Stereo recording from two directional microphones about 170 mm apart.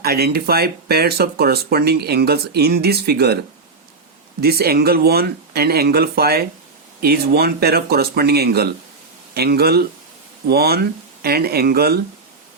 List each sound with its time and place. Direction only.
0.0 s speech: 65° right (ahead or behind)
4.4 s speech: 65° right (ahead or behind)